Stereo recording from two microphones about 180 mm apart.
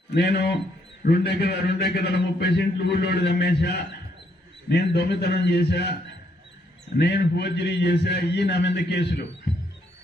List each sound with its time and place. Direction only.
0.1 s a man's voice: 65° left (ahead or behind)
7.0 s a man's voice: 70° left (ahead or behind)